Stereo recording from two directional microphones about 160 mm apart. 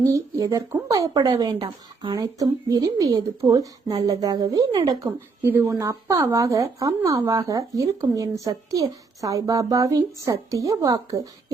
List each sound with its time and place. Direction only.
0.0 s a woman's voice: 20° right (ahead or behind)